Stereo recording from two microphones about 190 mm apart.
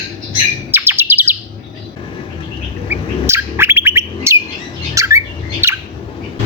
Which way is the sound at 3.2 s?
15° right (ahead or behind).